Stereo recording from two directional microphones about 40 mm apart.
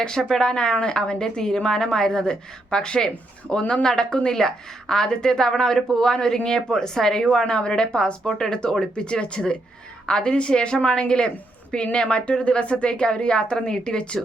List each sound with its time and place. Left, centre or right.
0.2 s a woman's voice: centre
3.5 s a woman's voice: left